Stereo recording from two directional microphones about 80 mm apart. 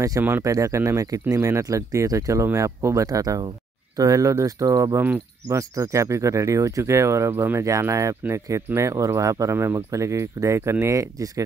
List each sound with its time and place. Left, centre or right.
0.4 s speech: right